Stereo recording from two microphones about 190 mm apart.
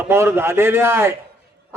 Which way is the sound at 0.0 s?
10° right (ahead or behind).